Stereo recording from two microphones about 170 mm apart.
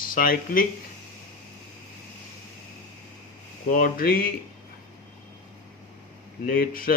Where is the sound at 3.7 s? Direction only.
55° left (ahead or behind).